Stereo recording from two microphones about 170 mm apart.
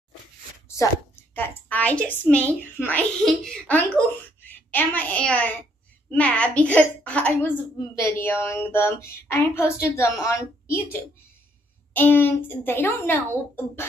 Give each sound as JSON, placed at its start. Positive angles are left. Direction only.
{"t": 0.7, "sound": "a woman's voice", "side_deg": 15}